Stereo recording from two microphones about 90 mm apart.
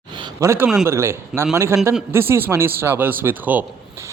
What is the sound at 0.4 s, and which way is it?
Speech, 25° right (ahead or behind).